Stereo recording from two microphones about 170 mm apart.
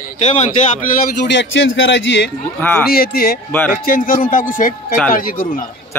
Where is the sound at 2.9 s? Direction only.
65° left (ahead or behind).